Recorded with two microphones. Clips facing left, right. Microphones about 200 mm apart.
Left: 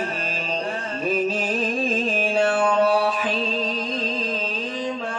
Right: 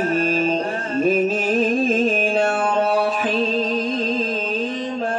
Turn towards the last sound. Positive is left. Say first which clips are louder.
# right 4 dB
turn(degrees=-50)  # may be behind; listen again after turning